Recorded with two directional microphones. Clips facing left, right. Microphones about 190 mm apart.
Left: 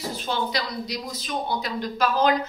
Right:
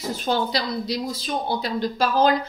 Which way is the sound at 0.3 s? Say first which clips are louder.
Right 4 dB; 35° right (ahead or behind).